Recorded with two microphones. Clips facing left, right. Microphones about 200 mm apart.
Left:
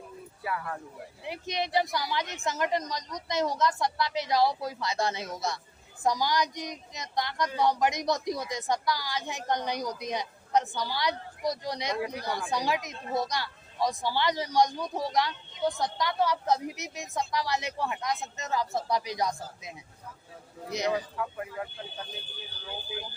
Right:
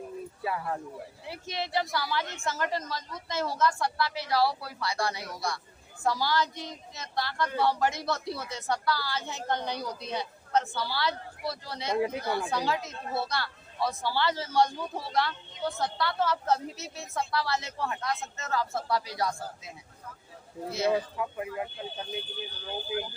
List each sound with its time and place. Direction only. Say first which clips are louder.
0.4 s speech: right 2 dB; 25° right (ahead or behind)
1.2 s speech: left 4 dB; 20° left (ahead or behind)
11.9 s speech: right 5 dB; 25° right (ahead or behind)
12.2 s speech: right 1 dB; 15° left (ahead or behind)
20.9 s speech: right 2 dB; 20° right (ahead or behind)